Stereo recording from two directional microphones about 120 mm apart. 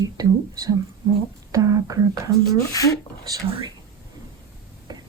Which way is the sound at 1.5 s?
30° right (ahead or behind).